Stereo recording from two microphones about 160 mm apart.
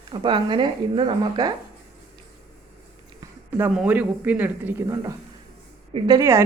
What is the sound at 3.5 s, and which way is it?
Speech, 10° right (ahead or behind).